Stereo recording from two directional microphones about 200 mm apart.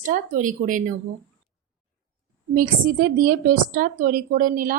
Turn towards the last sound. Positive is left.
turn(degrees=-45)  # may be behind; listen again after turning